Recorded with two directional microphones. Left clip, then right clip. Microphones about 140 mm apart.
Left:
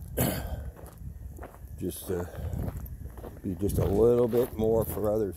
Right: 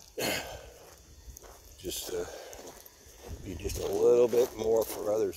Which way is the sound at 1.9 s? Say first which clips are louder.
Left 1 dB; 15° right (ahead or behind).